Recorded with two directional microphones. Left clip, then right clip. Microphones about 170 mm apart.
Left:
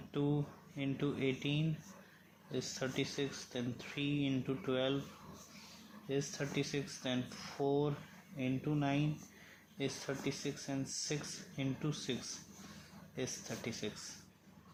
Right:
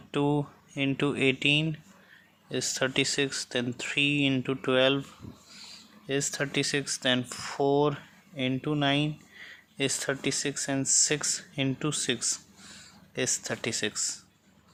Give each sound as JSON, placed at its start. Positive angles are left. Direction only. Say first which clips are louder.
{"t": 0.1, "sound": "speech", "louder": "right 10 dB", "side_deg": -55}
{"t": 6.1, "sound": "speech", "louder": "right 9 dB", "side_deg": -65}